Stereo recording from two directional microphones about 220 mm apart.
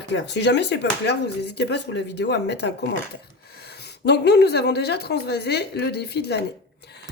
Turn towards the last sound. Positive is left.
turn(degrees=45)  # may be behind; listen again after turning